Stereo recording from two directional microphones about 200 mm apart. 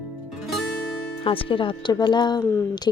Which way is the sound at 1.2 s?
25° left (ahead or behind).